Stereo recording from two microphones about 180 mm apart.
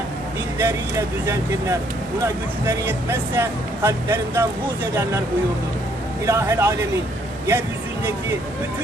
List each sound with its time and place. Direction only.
0.6 s speech: 15° right (ahead or behind)
6.2 s speech: 15° right (ahead or behind)